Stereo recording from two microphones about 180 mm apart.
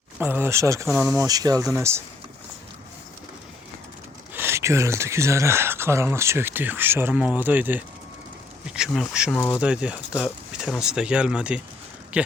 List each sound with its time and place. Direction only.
0.2 s speech: 10° right (ahead or behind)
4.4 s speech: 15° right (ahead or behind)